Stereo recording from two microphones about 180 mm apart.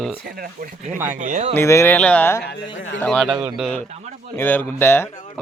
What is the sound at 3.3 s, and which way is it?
Speech, 10° right (ahead or behind).